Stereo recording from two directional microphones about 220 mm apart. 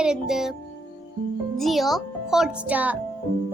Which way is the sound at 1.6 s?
Centre (ahead or behind).